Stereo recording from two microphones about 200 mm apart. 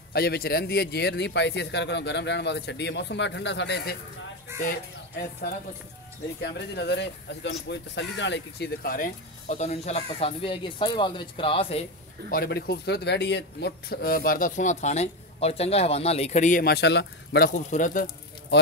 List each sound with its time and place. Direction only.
0.1 s a man's voice: 50° left (ahead or behind)
6.4 s speech: 60° left (ahead or behind); by 11.8 s 30° left (ahead or behind)
12.3 s a man's voice: 50° left (ahead or behind)
17.6 s speech: 40° left (ahead or behind)